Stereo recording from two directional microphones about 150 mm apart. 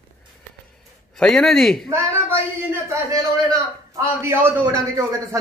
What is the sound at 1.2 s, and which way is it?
Speech, centre (ahead or behind).